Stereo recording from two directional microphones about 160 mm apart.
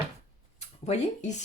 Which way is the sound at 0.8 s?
40° left (ahead or behind).